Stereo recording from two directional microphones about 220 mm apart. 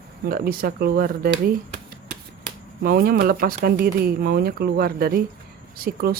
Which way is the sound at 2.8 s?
45° right (ahead or behind).